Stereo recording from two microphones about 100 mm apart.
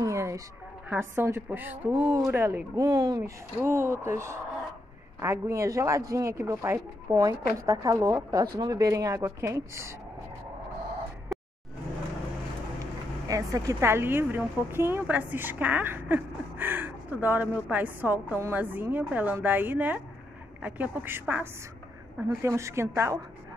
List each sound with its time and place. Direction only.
0.0 s a sound: 30° right (ahead or behind)
0.8 s speech: 25° right (ahead or behind)
3.6 s speech: 25° right (ahead or behind)
7.2 s speech: 35° right (ahead or behind)
13.3 s a woman's voice: 35° right (ahead or behind)